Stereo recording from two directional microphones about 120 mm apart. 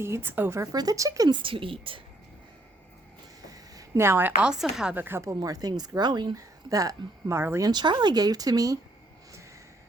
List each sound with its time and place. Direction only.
0.0 s a woman's voice: 20° right (ahead or behind)
1.4 s a woman's voice: 45° right (ahead or behind)
3.5 s a woman's voice: 25° right (ahead or behind); by 4.9 s 5° right (ahead or behind)
4.9 s a woman's voice: 20° right (ahead or behind)
7.7 s speech: 40° right (ahead or behind)